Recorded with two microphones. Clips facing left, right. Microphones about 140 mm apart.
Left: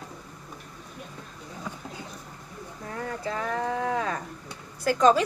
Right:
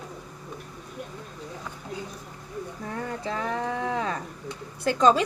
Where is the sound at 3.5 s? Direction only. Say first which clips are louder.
Left 3 dB; 25° right (ahead or behind).